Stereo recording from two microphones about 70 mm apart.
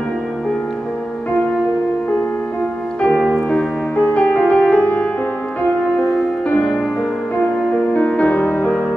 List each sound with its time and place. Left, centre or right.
3.4 s music: centre
6.0 s music: centre
7.7 s music: centre
8.5 s music: centre